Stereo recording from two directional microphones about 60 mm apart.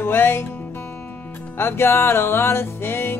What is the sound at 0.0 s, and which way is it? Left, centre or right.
Music, left.